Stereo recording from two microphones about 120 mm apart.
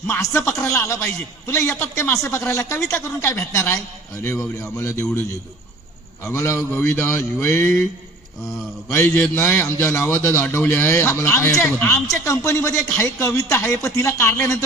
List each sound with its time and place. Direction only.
0.1 s a man's voice: 25° left (ahead or behind)
6.2 s a man's voice: 20° left (ahead or behind)
8.9 s a man's voice: 20° left (ahead or behind)